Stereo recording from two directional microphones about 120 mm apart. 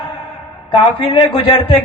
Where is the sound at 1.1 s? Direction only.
40° left (ahead or behind).